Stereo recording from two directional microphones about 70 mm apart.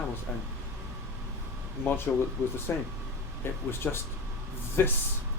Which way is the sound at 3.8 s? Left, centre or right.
Left.